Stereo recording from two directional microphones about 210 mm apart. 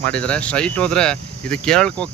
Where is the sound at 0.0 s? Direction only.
5° left (ahead or behind).